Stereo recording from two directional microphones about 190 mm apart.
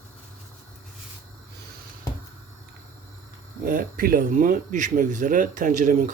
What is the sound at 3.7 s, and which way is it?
Speech, 45° right (ahead or behind).